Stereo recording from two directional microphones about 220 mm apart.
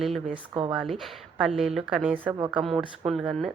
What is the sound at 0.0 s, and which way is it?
A woman's voice, centre (ahead or behind).